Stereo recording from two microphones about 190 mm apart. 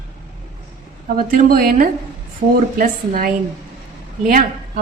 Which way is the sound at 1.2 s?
50° right (ahead or behind).